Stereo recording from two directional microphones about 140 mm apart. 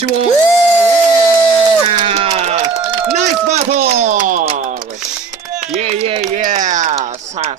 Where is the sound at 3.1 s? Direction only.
55° right (ahead or behind).